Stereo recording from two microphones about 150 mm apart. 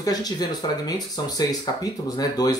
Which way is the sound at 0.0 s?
25° left (ahead or behind).